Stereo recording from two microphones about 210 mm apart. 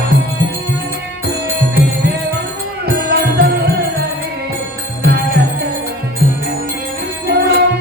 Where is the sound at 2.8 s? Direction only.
50° right (ahead or behind).